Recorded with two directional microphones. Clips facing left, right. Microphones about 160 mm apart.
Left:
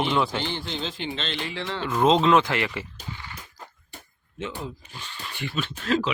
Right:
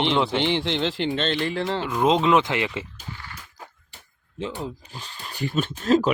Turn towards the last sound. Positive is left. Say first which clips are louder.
# right 5 dB
turn(degrees=-45)  # may be behind; listen again after turning